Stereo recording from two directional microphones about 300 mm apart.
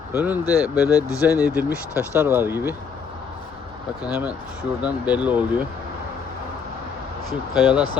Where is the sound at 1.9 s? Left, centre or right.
Centre.